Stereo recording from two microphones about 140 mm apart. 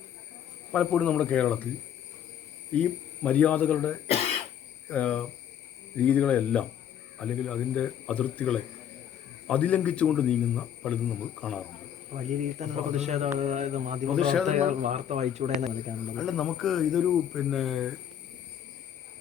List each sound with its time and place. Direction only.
0.7 s a man's voice: 10° left (ahead or behind)
2.7 s a man's voice: 10° left (ahead or behind)
12.1 s a man's voice: 55° right (ahead or behind)
16.1 s speech: 5° left (ahead or behind)